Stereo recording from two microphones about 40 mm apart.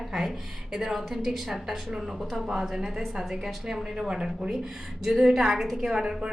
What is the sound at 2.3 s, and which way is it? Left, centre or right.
A woman's voice, centre.